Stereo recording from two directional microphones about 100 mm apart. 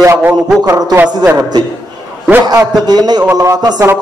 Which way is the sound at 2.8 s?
45° right (ahead or behind).